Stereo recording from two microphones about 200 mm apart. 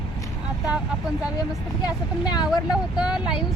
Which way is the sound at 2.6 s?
5° right (ahead or behind).